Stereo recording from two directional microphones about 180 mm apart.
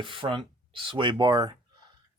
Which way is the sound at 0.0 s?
30° right (ahead or behind).